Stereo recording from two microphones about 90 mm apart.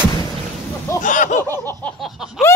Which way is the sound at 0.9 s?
30° left (ahead or behind).